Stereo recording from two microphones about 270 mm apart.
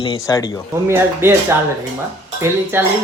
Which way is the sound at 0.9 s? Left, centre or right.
Centre.